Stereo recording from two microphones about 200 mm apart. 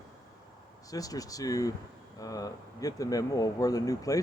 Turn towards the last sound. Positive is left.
turn(degrees=15)  # may be behind; listen again after turning